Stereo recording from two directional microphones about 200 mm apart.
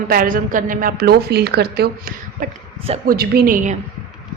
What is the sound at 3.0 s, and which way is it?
Speech, 50° right (ahead or behind).